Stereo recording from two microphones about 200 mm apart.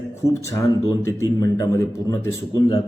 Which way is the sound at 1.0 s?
15° left (ahead or behind).